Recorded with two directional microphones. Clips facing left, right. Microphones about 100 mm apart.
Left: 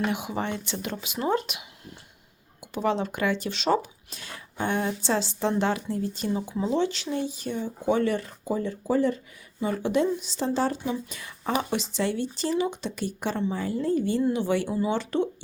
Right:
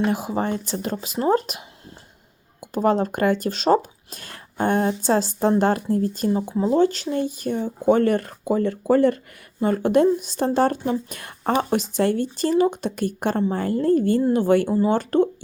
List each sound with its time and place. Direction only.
0.1 s speech: 35° right (ahead or behind); by 9.1 s 65° right (ahead or behind)
9.6 s speech: 50° right (ahead or behind)